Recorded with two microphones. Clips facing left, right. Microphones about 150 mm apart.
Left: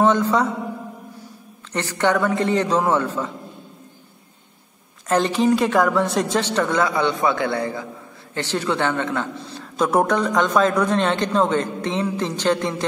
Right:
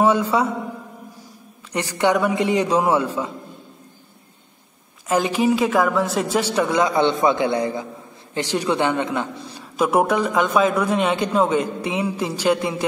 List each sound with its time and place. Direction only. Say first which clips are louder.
0.0 s a man's voice: even; 10° right (ahead or behind)
1.7 s a man's voice: right 1 dB; 15° right (ahead or behind)
5.0 s a man's voice: left 1 dB; 5° right (ahead or behind)
7.0 s a man's voice: right 3 dB; 20° right (ahead or behind)